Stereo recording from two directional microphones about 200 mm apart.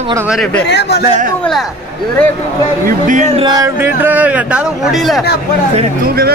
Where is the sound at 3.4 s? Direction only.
20° right (ahead or behind).